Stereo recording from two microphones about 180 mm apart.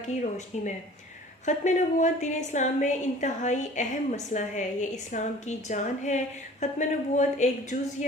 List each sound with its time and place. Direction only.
1.5 s a woman's voice: 40° left (ahead or behind)